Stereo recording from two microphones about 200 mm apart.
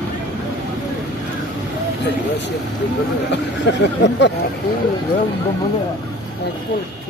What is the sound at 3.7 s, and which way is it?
Speech, 60° left (ahead or behind).